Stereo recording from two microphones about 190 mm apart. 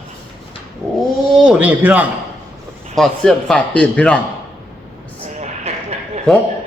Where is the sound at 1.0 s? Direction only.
5° right (ahead or behind).